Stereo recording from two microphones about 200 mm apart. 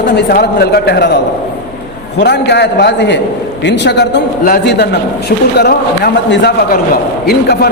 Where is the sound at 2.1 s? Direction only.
60° left (ahead or behind).